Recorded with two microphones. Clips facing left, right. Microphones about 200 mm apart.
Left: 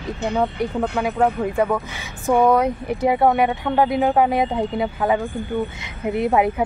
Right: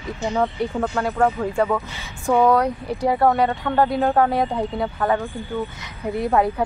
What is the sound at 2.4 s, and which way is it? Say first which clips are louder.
A woman's voice: left 1 dB; 20° left (ahead or behind).